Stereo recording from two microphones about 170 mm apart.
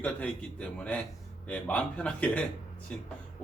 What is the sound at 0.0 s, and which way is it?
Speech, 10° left (ahead or behind).